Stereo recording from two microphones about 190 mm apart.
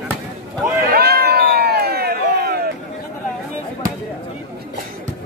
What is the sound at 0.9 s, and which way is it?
Cat, 55° right (ahead or behind).